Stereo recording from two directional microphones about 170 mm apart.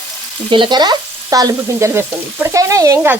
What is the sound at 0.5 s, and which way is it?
Stir, 25° right (ahead or behind).